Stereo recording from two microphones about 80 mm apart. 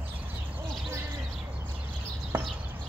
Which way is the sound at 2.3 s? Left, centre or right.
Right.